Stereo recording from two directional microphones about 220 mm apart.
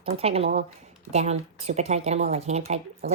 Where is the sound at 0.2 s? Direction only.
25° right (ahead or behind).